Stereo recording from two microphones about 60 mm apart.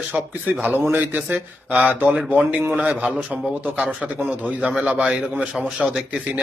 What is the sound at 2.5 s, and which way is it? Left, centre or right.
Speech, right.